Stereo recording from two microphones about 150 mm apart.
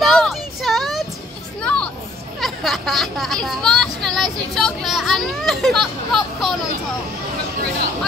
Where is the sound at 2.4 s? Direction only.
Centre (ahead or behind).